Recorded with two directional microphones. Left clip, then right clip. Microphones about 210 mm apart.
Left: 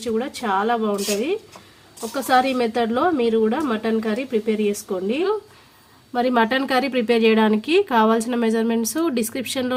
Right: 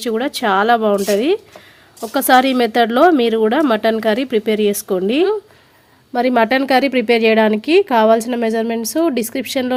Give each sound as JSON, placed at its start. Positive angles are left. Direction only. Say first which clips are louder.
{"t": 0.0, "sound": "a woman's voice", "louder": "right 6 dB", "side_deg": -40}
{"t": 6.1, "sound": "speech", "louder": "right 5 dB", "side_deg": -25}